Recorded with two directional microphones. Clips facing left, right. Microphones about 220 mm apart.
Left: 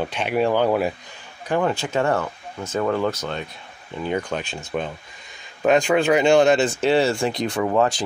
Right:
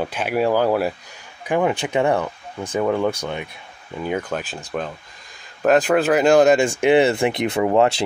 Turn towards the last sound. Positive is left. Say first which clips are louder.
# right 3 dB
turn(degrees=-25)  # may be behind; listen again after turning